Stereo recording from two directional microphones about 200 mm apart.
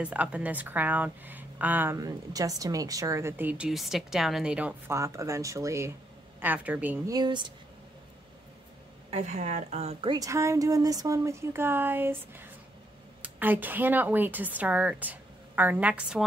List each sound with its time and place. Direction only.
0.0 s speech: 5° right (ahead or behind)
7.2 s speech: 20° right (ahead or behind)
9.1 s a woman's voice: 35° right (ahead or behind)
10.1 s speech: 15° right (ahead or behind)